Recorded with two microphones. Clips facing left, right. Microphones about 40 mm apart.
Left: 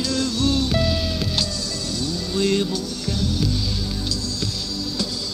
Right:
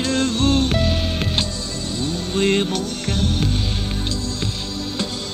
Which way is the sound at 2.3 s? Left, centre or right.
Right.